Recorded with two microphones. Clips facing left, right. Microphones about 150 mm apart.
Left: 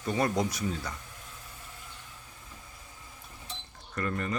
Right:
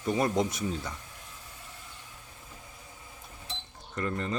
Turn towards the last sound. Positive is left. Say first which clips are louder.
# even
turn(degrees=-20)  # may be behind; listen again after turning